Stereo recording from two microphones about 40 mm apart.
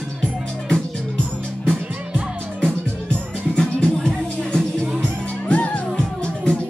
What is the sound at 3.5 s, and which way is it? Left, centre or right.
Music, centre.